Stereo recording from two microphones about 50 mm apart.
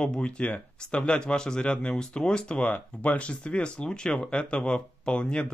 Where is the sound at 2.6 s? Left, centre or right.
Left.